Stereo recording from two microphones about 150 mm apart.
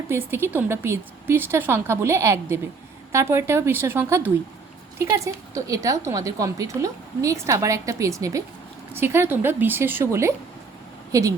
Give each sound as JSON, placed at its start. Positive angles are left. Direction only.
{"t": 0.1, "sound": "a woman's voice", "side_deg": -15}